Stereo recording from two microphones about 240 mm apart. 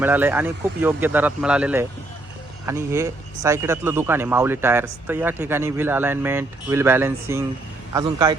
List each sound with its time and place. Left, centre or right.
0.0 s speech: centre